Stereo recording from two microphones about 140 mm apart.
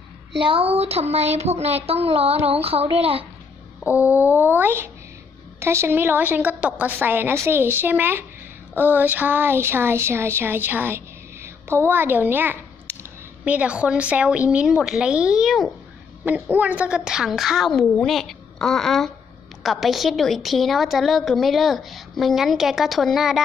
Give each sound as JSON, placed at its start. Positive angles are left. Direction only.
{"t": 0.4, "sound": "speech", "side_deg": -40}
{"t": 3.8, "sound": "a woman's voice", "side_deg": -10}
{"t": 16.3, "sound": "a woman's voice", "side_deg": -10}